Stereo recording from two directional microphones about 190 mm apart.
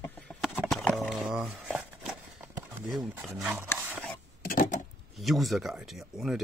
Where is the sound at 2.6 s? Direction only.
10° right (ahead or behind).